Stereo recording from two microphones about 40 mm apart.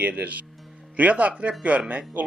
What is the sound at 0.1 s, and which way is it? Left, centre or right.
A man's voice, right.